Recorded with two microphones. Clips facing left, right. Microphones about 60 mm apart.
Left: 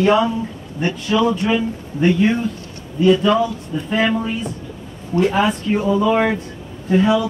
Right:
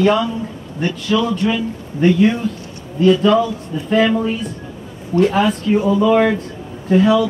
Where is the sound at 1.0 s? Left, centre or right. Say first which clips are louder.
Left 1 dB; left.